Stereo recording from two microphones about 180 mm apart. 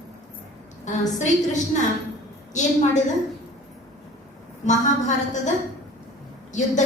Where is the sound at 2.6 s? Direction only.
40° left (ahead or behind).